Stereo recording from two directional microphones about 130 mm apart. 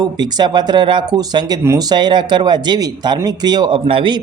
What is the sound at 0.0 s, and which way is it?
Speech, 35° right (ahead or behind).